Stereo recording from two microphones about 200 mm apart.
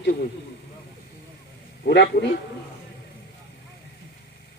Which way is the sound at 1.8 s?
60° left (ahead or behind).